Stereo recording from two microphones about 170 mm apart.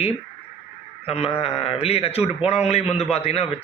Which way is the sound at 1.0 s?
35° left (ahead or behind).